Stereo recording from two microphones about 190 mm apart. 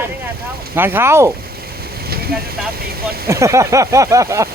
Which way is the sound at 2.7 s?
55° right (ahead or behind).